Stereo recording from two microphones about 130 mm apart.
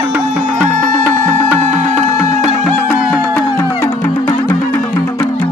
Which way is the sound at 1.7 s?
70° right (ahead or behind).